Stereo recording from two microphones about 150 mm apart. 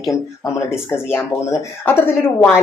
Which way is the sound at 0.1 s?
15° left (ahead or behind).